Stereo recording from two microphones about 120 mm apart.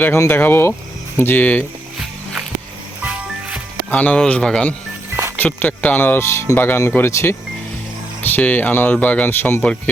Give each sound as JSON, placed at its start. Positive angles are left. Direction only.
{"t": 0.0, "sound": "speech", "side_deg": 20}
{"t": 3.0, "sound": "music", "side_deg": -10}
{"t": 3.9, "sound": "speech", "side_deg": 10}